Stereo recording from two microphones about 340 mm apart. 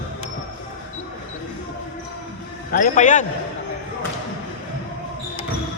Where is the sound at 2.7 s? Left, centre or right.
Left.